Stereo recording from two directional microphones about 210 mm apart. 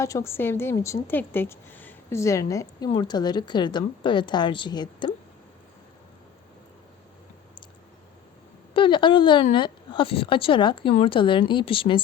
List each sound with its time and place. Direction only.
0.0 s a woman's voice: 15° left (ahead or behind)
8.7 s a woman's voice: 25° left (ahead or behind)